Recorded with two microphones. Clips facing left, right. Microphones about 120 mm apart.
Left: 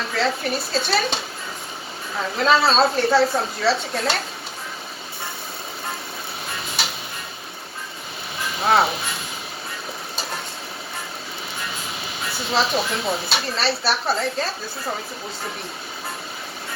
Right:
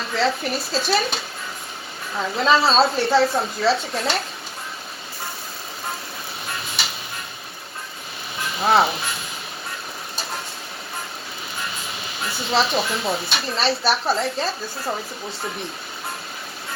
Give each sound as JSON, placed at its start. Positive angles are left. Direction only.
{"t": 0.2, "sound": "speech", "side_deg": 0}
{"t": 2.1, "sound": "speech", "side_deg": 0}
{"t": 8.5, "sound": "speech", "side_deg": 0}
{"t": 12.5, "sound": "speech", "side_deg": 0}